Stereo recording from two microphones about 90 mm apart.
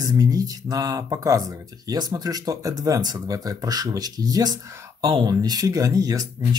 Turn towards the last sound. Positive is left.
turn(degrees=-40)  # may be behind; listen again after turning